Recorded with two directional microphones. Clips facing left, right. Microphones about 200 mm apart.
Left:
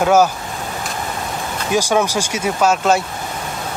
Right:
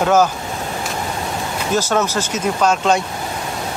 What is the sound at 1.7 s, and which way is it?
Speech, 10° left (ahead or behind).